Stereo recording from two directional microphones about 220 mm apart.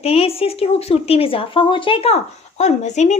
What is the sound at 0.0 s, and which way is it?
Speech, 25° left (ahead or behind).